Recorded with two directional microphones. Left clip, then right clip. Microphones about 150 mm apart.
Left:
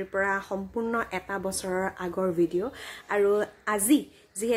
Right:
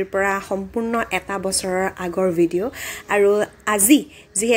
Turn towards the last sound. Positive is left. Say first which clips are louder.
# right 8 dB
turn(degrees=-15)  # may be behind; listen again after turning